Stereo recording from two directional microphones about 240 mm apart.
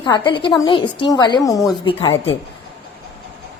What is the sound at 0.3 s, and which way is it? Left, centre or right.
A woman's voice, centre.